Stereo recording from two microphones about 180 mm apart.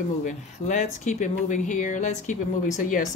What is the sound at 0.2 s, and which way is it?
Speech, 45° left (ahead or behind).